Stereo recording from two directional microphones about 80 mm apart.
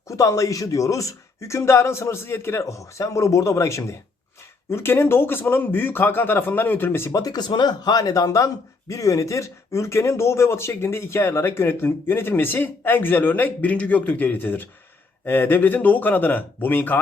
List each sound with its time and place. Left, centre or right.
0.1 s speech: left
7.1 s speech: left